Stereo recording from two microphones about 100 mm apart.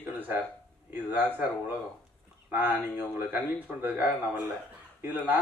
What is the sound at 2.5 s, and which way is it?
A man's voice, 20° right (ahead or behind).